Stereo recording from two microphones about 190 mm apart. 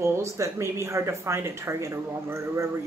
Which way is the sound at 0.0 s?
15° right (ahead or behind).